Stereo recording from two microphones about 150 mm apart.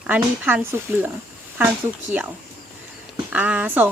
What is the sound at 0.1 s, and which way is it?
Speech, 10° right (ahead or behind).